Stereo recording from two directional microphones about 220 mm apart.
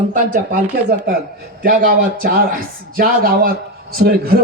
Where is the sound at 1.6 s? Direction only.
40° right (ahead or behind).